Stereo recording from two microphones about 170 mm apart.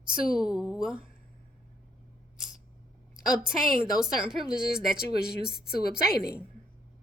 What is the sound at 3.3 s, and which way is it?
A woman's voice, 5° right (ahead or behind).